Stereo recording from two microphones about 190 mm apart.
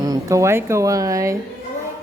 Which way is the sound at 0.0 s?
15° right (ahead or behind).